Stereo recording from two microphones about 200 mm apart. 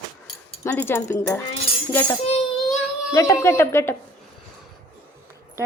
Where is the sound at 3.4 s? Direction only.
10° left (ahead or behind).